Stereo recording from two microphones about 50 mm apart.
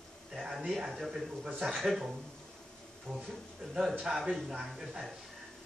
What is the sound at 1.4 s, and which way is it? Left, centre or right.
Speech, centre.